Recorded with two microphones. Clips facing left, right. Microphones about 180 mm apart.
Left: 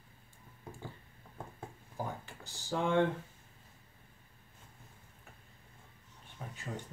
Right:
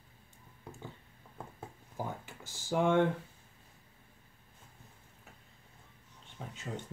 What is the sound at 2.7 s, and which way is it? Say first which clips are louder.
Speech: right 2 dB; 15° right (ahead or behind).